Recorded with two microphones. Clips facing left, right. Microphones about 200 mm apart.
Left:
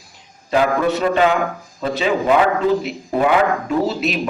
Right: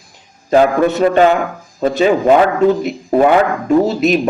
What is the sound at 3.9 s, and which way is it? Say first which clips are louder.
Speech: right 8 dB; 45° right (ahead or behind).